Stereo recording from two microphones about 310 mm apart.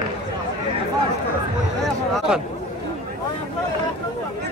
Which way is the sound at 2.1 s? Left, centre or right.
Centre.